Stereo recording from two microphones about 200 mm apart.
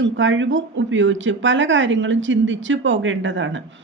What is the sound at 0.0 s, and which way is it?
A woman's voice, 70° right (ahead or behind).